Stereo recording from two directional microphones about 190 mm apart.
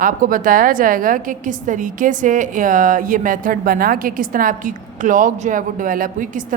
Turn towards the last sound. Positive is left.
turn(degrees=-45)  # may be behind; listen again after turning